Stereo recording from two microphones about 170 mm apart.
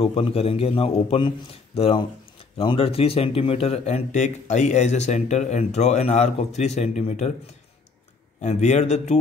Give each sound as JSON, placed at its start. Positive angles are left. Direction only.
{"t": 0.0, "sound": "speech", "side_deg": 30}
{"t": 8.4, "sound": "speech", "side_deg": 40}